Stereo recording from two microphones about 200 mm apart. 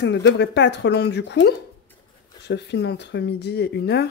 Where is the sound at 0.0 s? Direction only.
60° left (ahead or behind).